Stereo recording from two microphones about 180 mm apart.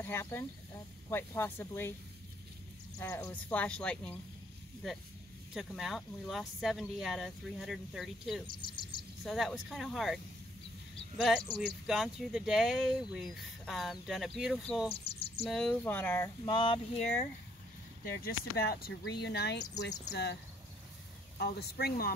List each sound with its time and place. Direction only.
0.0 s speech: 15° left (ahead or behind)
3.0 s speech: 15° left (ahead or behind)
5.5 s speech: centre (ahead or behind)
8.5 s speech: 25° left (ahead or behind)
9.2 s speech: centre (ahead or behind)
15.0 s bird: 35° left (ahead or behind)
15.4 s speech: centre (ahead or behind)
16.4 s speech: 25° left (ahead or behind)
18.6 s speech: 60° left (ahead or behind)
21.4 s speech: 60° left (ahead or behind)